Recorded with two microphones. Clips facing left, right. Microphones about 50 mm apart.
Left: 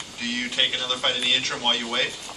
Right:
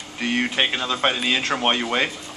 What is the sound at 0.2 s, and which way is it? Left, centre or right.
Speech, right.